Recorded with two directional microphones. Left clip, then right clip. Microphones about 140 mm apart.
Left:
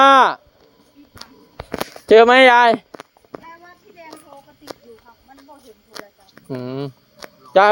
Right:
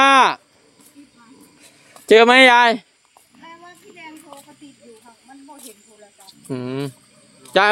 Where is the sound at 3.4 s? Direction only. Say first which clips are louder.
Even; 20° right (ahead or behind).